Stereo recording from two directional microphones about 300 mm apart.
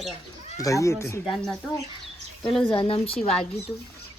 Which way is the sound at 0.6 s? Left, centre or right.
Centre.